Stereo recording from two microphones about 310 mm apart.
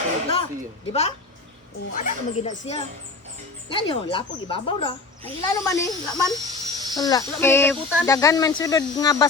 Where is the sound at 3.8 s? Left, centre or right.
Centre.